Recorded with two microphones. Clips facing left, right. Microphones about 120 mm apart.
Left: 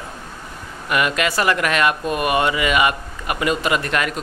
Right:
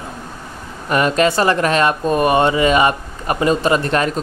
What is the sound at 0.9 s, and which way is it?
Speech, 35° right (ahead or behind).